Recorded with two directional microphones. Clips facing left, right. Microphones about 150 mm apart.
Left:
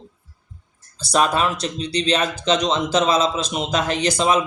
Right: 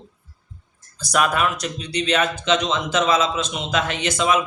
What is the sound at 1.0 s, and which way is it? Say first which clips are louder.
Speech: left 1 dB; 30° left (ahead or behind).